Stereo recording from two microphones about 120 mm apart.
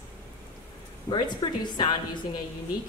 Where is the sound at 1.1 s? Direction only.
40° left (ahead or behind).